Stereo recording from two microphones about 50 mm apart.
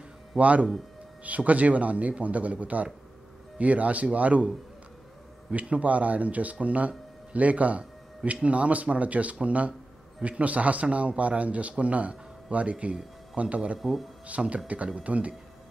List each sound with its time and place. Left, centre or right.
0.4 s speech: right
5.5 s speech: right
13.7 s speech: centre
14.2 s speech: right